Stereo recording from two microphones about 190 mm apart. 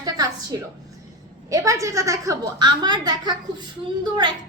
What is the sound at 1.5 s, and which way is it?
A woman's voice, 15° right (ahead or behind).